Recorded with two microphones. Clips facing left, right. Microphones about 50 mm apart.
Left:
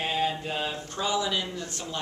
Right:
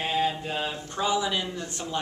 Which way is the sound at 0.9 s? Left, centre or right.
Centre.